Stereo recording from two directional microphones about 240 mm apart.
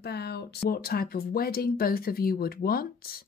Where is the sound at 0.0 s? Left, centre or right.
Left.